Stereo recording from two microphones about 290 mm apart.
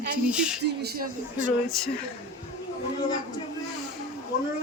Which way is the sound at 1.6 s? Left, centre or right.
Centre.